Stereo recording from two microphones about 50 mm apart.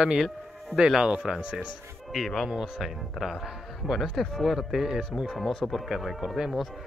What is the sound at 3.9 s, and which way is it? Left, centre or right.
Speech, centre.